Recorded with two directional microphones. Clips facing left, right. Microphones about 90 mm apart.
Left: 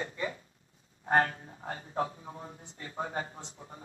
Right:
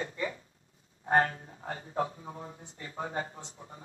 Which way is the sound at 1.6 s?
35° left (ahead or behind).